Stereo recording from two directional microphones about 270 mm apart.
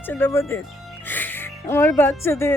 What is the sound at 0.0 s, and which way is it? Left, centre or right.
Speech, centre.